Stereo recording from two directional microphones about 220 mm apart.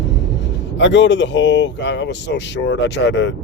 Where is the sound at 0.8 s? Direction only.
55° left (ahead or behind).